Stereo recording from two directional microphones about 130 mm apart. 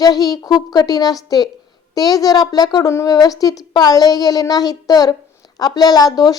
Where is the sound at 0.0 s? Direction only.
30° left (ahead or behind).